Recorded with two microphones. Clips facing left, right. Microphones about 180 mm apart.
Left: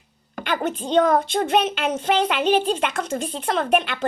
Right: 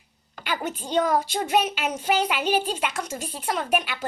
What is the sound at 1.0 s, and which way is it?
Speech, 50° left (ahead or behind).